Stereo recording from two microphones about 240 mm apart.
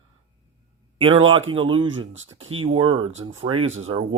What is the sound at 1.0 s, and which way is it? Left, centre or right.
A man's voice, right.